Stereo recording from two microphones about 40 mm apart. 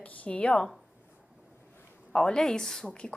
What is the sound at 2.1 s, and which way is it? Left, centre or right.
Speech, centre.